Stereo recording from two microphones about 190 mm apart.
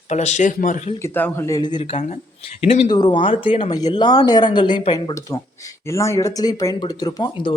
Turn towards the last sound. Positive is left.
turn(degrees=25)  # may be behind; listen again after turning